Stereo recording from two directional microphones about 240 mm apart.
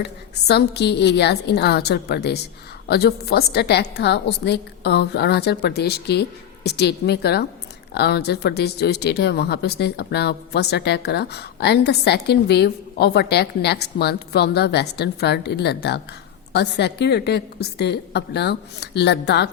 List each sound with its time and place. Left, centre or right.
0.0 s speech: left